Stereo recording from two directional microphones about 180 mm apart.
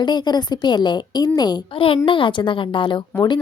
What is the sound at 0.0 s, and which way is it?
A woman's voice, 25° left (ahead or behind).